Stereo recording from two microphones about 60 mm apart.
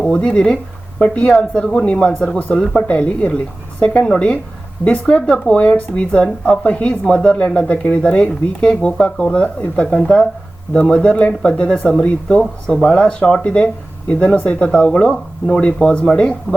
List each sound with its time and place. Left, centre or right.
0.0 s speech: centre